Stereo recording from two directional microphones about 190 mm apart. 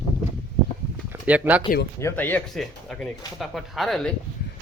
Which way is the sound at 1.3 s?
10° right (ahead or behind).